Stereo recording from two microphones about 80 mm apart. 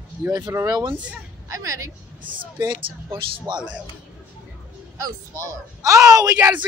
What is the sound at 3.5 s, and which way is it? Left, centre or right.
Speech, right.